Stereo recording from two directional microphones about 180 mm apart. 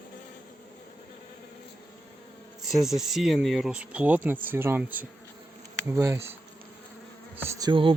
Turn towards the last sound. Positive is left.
turn(degrees=-30)  # may be behind; listen again after turning